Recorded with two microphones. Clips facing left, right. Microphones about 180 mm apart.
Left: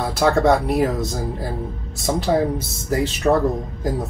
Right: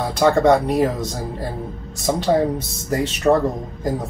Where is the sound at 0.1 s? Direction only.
Centre (ahead or behind).